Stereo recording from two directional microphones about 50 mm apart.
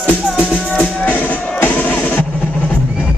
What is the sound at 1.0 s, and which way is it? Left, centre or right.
Music, left.